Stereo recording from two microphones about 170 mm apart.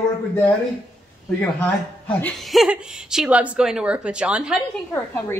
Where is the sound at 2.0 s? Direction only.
5° left (ahead or behind).